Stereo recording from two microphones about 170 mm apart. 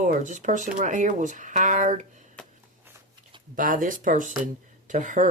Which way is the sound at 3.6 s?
50° right (ahead or behind).